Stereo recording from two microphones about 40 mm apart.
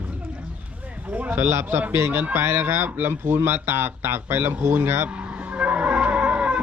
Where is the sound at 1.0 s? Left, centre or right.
Right.